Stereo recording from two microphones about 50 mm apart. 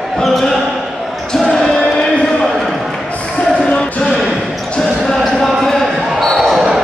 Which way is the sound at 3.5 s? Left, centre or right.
Centre.